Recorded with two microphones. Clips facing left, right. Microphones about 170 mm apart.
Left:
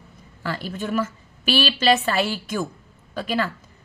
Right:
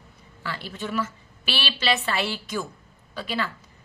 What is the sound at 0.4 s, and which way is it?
A woman's voice, 45° left (ahead or behind).